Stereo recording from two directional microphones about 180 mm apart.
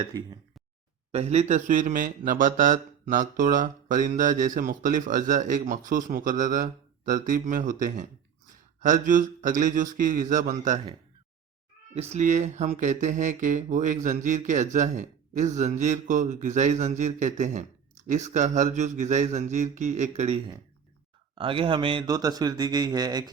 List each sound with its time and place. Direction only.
0.1 s a man's voice: 25° right (ahead or behind)
1.1 s speech: 35° right (ahead or behind)
11.9 s a man's voice: 40° right (ahead or behind); by 23.3 s 20° right (ahead or behind)